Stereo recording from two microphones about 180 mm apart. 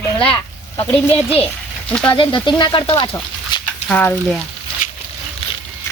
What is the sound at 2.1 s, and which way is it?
Speech, 25° left (ahead or behind).